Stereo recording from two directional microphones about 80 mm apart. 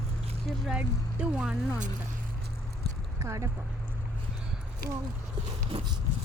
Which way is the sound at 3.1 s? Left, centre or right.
Right.